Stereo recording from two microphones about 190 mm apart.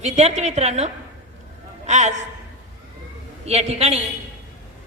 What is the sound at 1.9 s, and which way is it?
Speech, 40° right (ahead or behind).